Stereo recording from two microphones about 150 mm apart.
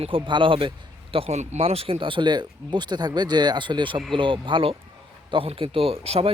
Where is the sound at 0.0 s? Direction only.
35° right (ahead or behind).